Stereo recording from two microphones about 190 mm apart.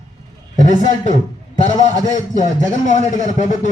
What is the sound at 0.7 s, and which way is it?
Speech, 40° left (ahead or behind).